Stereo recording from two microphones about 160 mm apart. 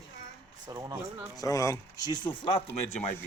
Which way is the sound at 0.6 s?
20° right (ahead or behind).